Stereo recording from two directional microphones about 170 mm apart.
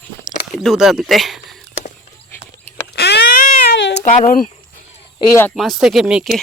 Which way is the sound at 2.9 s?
70° left (ahead or behind).